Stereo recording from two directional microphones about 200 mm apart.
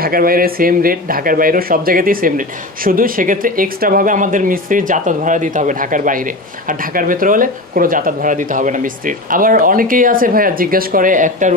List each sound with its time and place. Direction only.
0.0 s speech: 45° right (ahead or behind)